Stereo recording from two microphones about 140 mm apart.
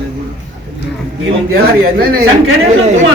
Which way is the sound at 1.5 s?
90° right.